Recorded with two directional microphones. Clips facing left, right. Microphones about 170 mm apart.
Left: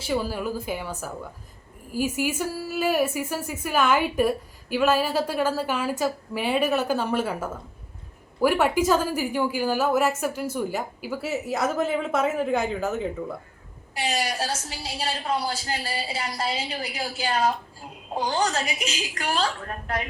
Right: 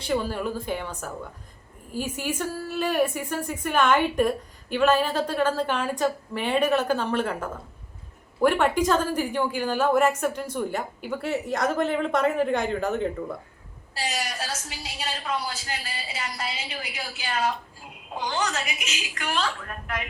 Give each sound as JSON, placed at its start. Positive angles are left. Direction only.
{"t": 0.0, "sound": "a woman's voice", "side_deg": 5}
{"t": 13.9, "sound": "a woman's voice", "side_deg": 25}